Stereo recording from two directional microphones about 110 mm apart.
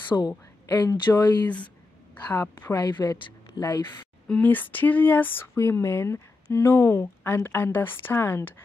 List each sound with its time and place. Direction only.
0.1 s speech: 25° left (ahead or behind)
0.7 s a woman's voice: 40° left (ahead or behind)
2.3 s speech: 20° left (ahead or behind)
2.7 s a woman's voice: 40° left (ahead or behind)
4.3 s speech: 15° left (ahead or behind)